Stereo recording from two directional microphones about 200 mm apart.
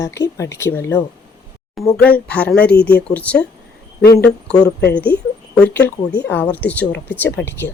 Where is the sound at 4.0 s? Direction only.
50° left (ahead or behind).